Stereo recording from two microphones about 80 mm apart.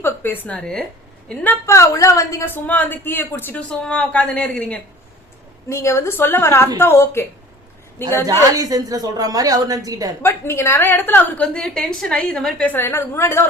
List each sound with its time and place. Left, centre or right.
0.0 s a woman's voice: left
0.4 s a woman's voice: centre
1.6 s a woman's voice: left
2.4 s a woman's voice: left
3.7 s a woman's voice: centre
5.6 s a woman's voice: left
8.2 s speech: right
10.2 s a woman's voice: left
11.3 s a woman's voice: centre
12.6 s a woman's voice: left